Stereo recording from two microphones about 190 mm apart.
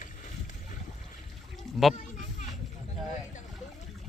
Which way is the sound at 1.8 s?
Centre (ahead or behind).